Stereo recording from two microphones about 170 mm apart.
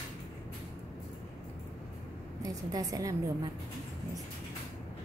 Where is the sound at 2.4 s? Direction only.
20° right (ahead or behind).